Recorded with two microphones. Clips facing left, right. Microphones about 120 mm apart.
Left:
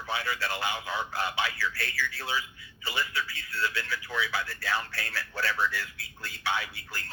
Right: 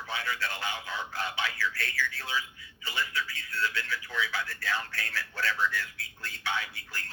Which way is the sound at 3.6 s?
30° left (ahead or behind).